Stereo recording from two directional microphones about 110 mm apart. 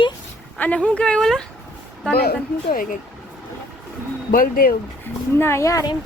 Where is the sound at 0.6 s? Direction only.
10° left (ahead or behind).